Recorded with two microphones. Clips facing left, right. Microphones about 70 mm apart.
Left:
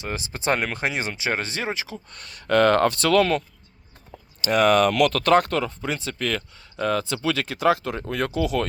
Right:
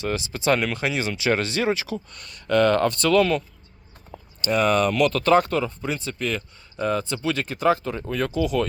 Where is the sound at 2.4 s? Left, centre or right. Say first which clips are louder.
Left 1 dB; left.